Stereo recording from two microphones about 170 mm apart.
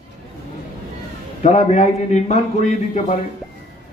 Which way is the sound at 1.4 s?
40° left (ahead or behind).